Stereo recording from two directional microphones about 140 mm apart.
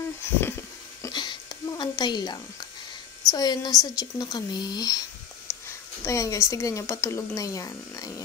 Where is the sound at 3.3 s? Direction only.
30° left (ahead or behind).